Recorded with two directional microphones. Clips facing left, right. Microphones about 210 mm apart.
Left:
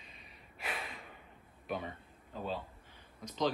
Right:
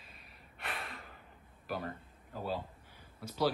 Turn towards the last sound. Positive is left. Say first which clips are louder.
# right 1 dB
turn(degrees=-5)  # may be behind; listen again after turning